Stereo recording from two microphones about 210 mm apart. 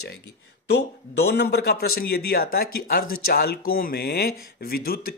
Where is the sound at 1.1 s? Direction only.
55° left (ahead or behind).